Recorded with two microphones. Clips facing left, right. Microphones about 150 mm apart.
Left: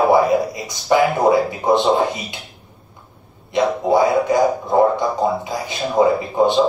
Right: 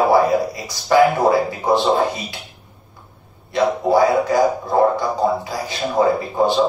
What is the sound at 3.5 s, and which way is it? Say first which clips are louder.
A man's voice: even; 20° left (ahead or behind).